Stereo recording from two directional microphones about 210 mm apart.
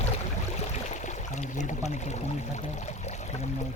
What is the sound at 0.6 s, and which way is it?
Speech, 35° left (ahead or behind).